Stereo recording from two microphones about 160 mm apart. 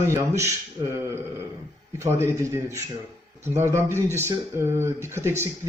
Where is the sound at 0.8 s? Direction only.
30° right (ahead or behind).